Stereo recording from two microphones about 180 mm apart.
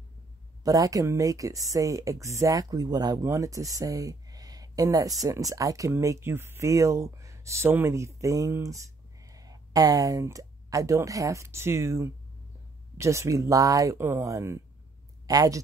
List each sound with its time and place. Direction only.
0.7 s speech: 20° right (ahead or behind)